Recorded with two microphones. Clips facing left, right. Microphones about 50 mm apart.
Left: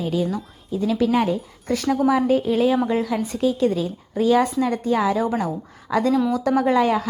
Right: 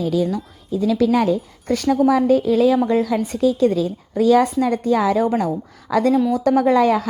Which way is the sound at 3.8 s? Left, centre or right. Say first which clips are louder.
Right 4 dB; right.